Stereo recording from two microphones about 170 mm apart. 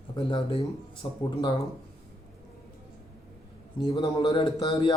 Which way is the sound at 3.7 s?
25° left (ahead or behind).